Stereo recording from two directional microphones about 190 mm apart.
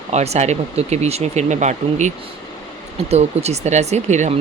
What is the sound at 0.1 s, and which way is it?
Speech, 35° right (ahead or behind).